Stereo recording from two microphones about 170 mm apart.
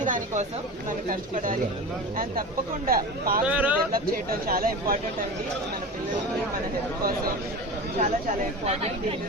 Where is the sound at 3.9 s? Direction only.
60° right (ahead or behind).